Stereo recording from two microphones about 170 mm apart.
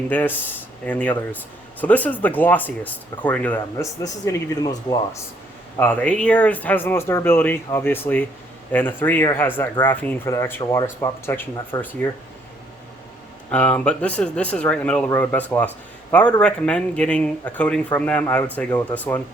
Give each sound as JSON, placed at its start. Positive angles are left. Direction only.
{"t": 0.1, "sound": "speech", "side_deg": 10}
{"t": 4.0, "sound": "speech", "side_deg": 20}
{"t": 5.7, "sound": "speech", "side_deg": 10}
{"t": 13.5, "sound": "speech", "side_deg": 10}